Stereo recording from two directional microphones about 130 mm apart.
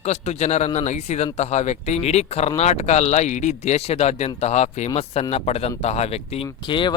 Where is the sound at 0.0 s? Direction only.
60° left (ahead or behind).